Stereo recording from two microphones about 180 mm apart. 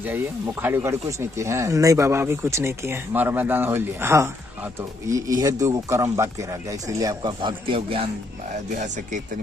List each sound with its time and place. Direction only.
0.0 s a man's voice: 10° right (ahead or behind); by 8.1 s 30° right (ahead or behind)